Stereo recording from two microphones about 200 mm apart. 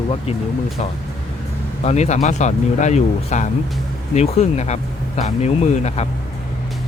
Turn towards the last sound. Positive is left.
turn(degrees=35)  # may be behind; listen again after turning